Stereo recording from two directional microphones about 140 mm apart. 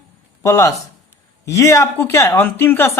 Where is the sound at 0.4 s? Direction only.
20° left (ahead or behind).